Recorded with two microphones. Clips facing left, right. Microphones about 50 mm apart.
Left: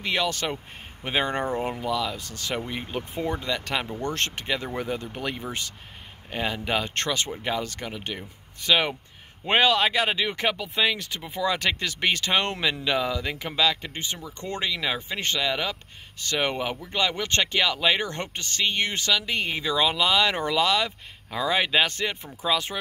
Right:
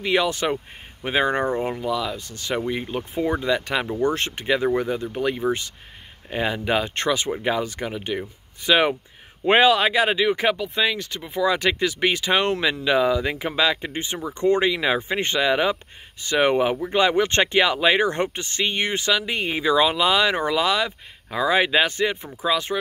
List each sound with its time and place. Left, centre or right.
0.0 s speech: centre
1.0 s speech: centre